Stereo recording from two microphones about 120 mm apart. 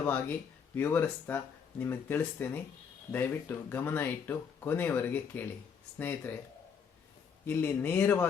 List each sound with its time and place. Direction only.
0.0 s speech: 15° left (ahead or behind)
7.4 s speech: 15° left (ahead or behind)